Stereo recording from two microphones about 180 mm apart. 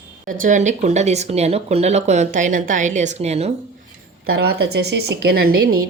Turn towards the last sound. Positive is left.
turn(degrees=-55)  # may be behind; listen again after turning